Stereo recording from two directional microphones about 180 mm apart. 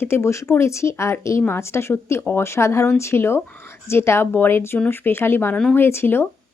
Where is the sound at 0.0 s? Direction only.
15° left (ahead or behind).